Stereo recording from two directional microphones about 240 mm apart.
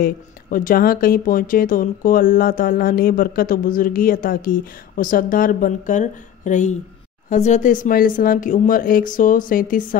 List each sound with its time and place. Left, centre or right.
0.0 s speech: left